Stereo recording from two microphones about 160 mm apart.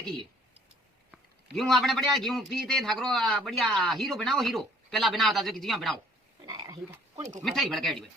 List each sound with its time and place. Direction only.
1.5 s a man's voice: centre (ahead or behind)
6.4 s frog: 25° right (ahead or behind)
7.4 s a man's voice: centre (ahead or behind)